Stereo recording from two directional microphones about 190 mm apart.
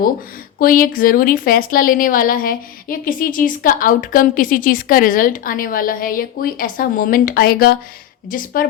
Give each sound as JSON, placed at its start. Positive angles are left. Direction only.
{"t": 0.6, "sound": "a woman's voice", "side_deg": 50}